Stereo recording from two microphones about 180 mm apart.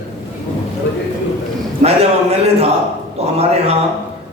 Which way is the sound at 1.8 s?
35° right (ahead or behind).